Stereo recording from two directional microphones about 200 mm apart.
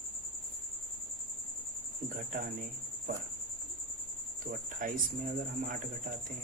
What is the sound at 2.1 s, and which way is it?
Speech, 45° right (ahead or behind).